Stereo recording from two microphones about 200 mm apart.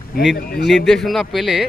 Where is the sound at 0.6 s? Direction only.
Centre (ahead or behind).